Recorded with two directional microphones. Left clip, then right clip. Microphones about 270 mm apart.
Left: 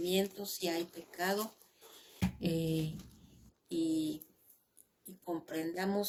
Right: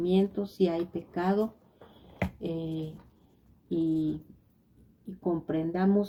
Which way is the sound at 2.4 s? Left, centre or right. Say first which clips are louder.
Left 1 dB; left.